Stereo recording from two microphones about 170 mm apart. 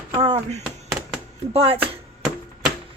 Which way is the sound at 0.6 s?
Centre (ahead or behind).